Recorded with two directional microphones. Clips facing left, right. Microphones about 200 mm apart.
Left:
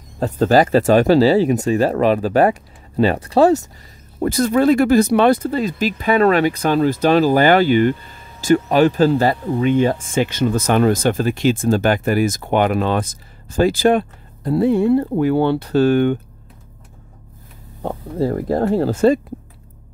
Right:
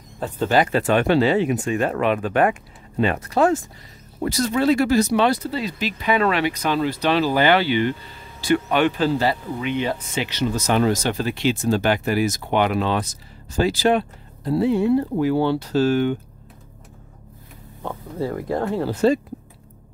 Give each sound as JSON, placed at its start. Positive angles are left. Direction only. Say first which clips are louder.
{"t": 0.2, "sound": "speech", "louder": "left 5 dB", "side_deg": 40}
{"t": 4.2, "sound": "speech", "louder": "left 5 dB", "side_deg": 50}
{"t": 17.8, "sound": "speech", "louder": "left 6 dB", "side_deg": 35}